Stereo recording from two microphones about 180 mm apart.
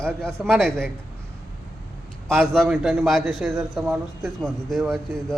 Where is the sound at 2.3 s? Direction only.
Centre (ahead or behind).